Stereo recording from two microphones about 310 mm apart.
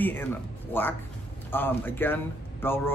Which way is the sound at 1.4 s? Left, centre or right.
Centre.